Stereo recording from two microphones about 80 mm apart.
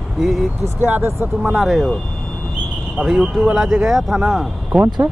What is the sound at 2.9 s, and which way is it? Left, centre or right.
Speech, centre.